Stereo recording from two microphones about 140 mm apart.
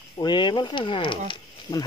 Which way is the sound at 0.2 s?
35° left (ahead or behind).